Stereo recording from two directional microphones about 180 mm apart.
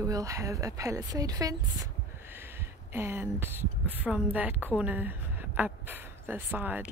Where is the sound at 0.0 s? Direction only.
20° right (ahead or behind).